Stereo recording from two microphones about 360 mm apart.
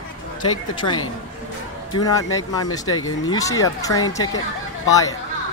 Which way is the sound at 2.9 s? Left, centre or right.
Left.